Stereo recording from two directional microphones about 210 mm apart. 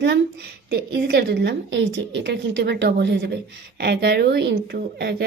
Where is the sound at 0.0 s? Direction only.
55° right (ahead or behind).